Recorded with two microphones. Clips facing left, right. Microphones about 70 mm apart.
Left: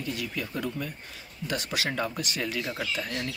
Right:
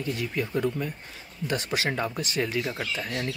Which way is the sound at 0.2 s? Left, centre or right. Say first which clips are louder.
Right 5 dB; right.